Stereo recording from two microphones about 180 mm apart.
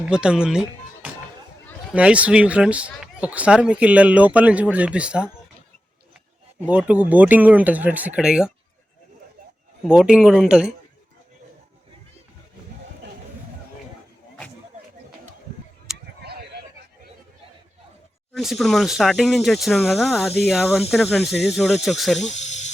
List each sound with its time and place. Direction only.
0.0 s speech: 5° right (ahead or behind)
6.7 s speech: 5° right (ahead or behind)
9.8 s speech: centre (ahead or behind)
18.3 s speech: centre (ahead or behind)
22.2 s snake: 40° left (ahead or behind)